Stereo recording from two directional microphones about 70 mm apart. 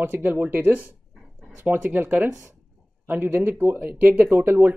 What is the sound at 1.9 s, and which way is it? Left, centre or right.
Speech, right.